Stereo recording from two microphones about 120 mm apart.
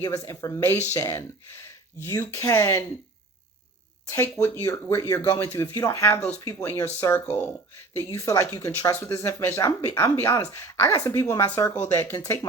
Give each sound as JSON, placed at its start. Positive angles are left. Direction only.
{"t": 0.0, "sound": "speech", "side_deg": 30}
{"t": 4.1, "sound": "speech", "side_deg": 25}
{"t": 12.1, "sound": "speech", "side_deg": 30}